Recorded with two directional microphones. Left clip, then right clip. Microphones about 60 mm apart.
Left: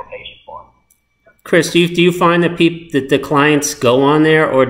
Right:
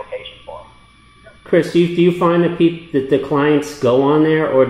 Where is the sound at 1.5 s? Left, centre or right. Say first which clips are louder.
Left 2 dB; left.